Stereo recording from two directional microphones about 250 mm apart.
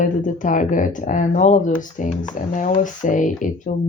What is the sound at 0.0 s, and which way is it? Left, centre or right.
Speech, left.